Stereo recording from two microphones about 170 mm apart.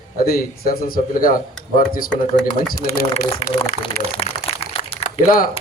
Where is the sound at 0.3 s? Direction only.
60° left (ahead or behind).